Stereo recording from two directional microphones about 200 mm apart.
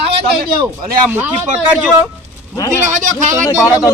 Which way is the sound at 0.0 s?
30° right (ahead or behind).